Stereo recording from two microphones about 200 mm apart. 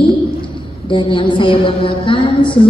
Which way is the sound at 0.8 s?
25° left (ahead or behind).